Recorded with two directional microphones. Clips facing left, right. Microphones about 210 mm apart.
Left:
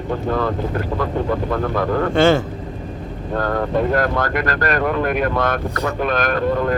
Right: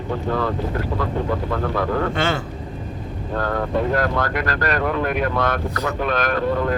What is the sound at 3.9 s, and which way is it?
Speech, 50° left (ahead or behind).